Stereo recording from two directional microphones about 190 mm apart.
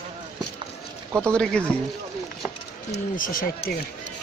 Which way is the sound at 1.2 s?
5° left (ahead or behind).